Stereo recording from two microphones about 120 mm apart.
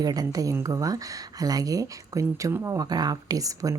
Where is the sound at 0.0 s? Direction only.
30° right (ahead or behind).